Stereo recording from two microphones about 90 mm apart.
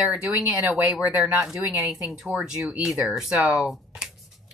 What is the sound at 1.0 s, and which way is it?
Speech, 15° right (ahead or behind).